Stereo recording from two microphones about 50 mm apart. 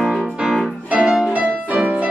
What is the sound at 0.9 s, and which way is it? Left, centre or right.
Music, right.